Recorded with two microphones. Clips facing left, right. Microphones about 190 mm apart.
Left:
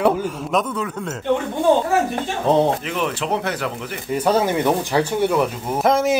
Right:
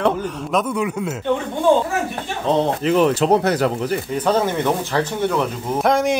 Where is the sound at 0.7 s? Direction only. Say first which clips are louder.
Right 4 dB; 10° right (ahead or behind).